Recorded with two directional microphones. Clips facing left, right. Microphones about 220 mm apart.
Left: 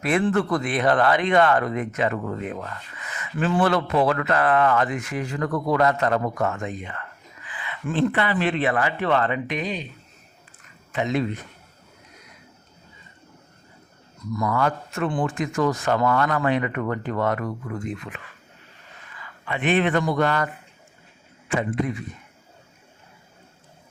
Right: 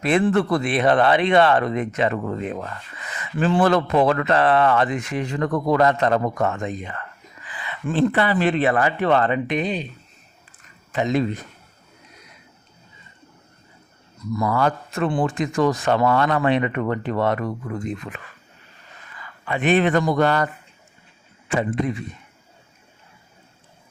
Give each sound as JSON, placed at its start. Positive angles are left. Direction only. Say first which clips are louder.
{"t": 0.0, "sound": "speech", "louder": "right 3 dB", "side_deg": -30}
{"t": 10.9, "sound": "speech", "louder": "right 3 dB", "side_deg": -40}
{"t": 14.3, "sound": "speech", "louder": "right 2 dB", "side_deg": -30}
{"t": 19.5, "sound": "speech", "louder": "right 3 dB", "side_deg": -40}
{"t": 21.5, "sound": "speech", "louder": "right 2 dB", "side_deg": -25}